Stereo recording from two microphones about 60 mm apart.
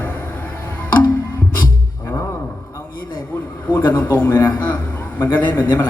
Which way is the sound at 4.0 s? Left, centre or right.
Left.